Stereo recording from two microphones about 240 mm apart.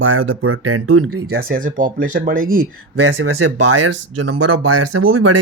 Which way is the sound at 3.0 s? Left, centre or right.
Right.